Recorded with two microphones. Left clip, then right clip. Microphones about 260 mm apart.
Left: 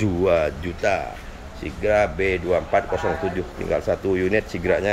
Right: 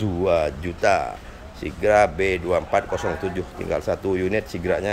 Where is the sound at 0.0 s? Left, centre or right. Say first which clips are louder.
Left 1 dB; centre.